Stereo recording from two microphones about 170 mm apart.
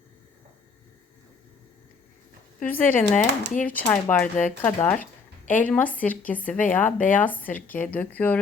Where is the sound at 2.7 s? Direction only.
10° left (ahead or behind).